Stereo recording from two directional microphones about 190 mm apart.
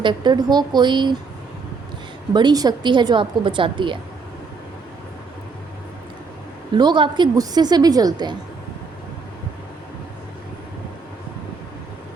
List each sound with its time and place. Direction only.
0.0 s a woman's voice: 25° right (ahead or behind)
2.3 s a woman's voice: 20° right (ahead or behind)
6.7 s a woman's voice: 25° right (ahead or behind)